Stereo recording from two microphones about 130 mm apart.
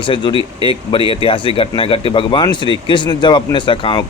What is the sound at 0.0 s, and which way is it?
Speech, 40° left (ahead or behind).